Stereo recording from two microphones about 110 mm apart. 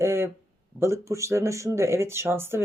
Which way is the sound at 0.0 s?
25° right (ahead or behind).